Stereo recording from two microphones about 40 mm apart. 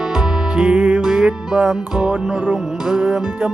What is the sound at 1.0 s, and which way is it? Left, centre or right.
Music, centre.